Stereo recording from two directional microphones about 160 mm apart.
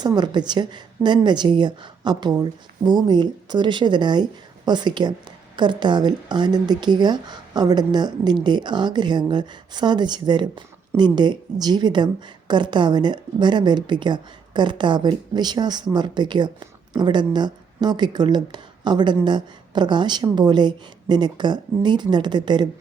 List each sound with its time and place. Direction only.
0.0 s a woman's voice: 25° right (ahead or behind)